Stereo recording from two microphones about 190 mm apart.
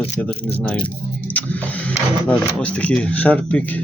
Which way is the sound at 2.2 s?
5° left (ahead or behind).